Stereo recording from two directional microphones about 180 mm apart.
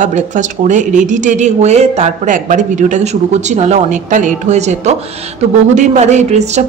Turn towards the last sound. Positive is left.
turn(degrees=-40)  # may be behind; listen again after turning